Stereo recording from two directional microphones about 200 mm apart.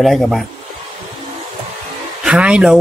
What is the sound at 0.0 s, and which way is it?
Speech, centre (ahead or behind).